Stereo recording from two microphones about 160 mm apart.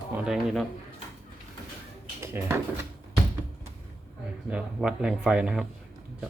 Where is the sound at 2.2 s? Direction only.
15° right (ahead or behind).